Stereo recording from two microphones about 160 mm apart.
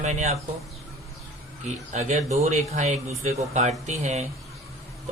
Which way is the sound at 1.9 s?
45° right (ahead or behind).